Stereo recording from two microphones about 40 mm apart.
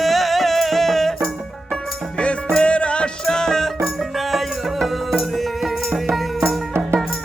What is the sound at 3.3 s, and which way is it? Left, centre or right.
Music, centre.